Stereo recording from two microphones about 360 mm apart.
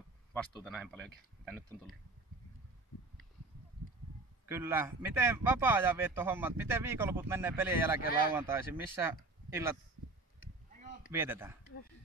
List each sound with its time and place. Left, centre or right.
0.3 s speech: centre
4.5 s a man's voice: centre
10.7 s a sound: right
11.1 s a man's voice: centre